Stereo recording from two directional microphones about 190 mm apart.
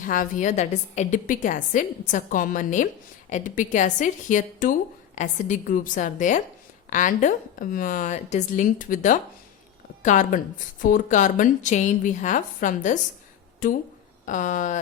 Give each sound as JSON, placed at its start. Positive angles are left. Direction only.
{"t": 0.1, "sound": "a woman's voice", "side_deg": 45}